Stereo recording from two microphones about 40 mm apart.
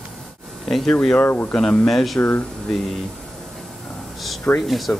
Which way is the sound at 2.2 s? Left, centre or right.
Left.